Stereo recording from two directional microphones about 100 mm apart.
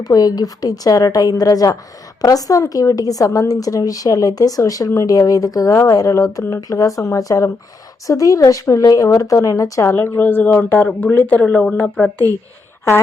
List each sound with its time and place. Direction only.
0.0 s speech: 40° left (ahead or behind); by 12.1 s 10° left (ahead or behind)